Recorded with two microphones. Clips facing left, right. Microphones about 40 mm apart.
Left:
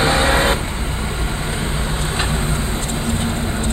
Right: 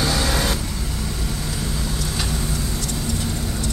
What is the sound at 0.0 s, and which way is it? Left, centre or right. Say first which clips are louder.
Vehicle: left 6 dB; left.